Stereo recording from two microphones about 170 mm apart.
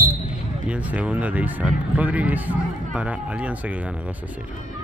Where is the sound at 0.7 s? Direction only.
10° right (ahead or behind).